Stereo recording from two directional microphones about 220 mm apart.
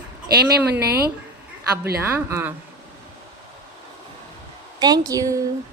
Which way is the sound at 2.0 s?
10° right (ahead or behind).